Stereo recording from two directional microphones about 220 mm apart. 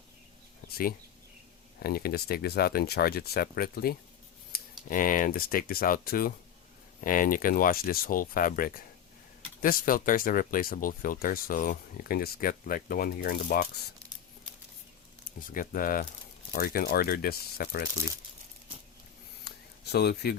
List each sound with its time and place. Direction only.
0.7 s speech: 40° left (ahead or behind)
15.4 s speech: 40° left (ahead or behind)
19.5 s a sound: 45° left (ahead or behind)